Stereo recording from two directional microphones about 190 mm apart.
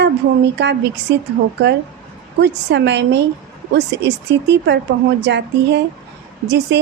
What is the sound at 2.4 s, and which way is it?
A woman's voice, 65° right (ahead or behind).